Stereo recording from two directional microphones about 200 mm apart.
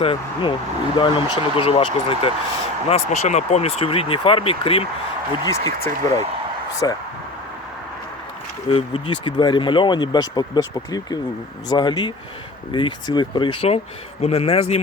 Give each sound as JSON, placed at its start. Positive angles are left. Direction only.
{"t": 0.0, "sound": "speech", "side_deg": 25}
{"t": 5.5, "sound": "speech", "side_deg": 15}
{"t": 8.7, "sound": "speech", "side_deg": 25}